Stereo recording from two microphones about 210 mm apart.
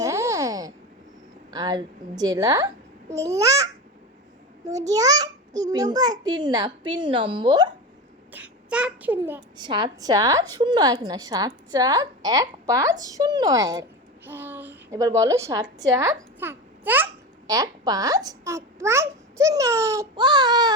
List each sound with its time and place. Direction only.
0.0 s a sound: 15° right (ahead or behind)
1.5 s a woman's voice: 20° right (ahead or behind)
4.9 s a child's voice: 15° right (ahead or behind)
8.3 s a child's voice: 5° right (ahead or behind)
9.6 s a woman's voice: 20° right (ahead or behind)